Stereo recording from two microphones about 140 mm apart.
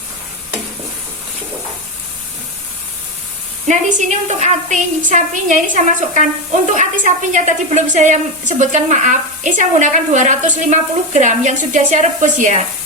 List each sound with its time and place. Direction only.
3.7 s a woman's voice: 60° right (ahead or behind)